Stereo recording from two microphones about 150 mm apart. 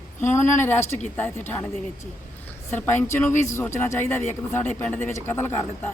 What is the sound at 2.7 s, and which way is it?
Speech, 15° left (ahead or behind).